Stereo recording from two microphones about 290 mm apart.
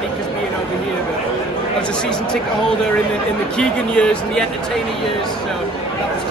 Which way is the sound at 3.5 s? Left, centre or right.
Centre.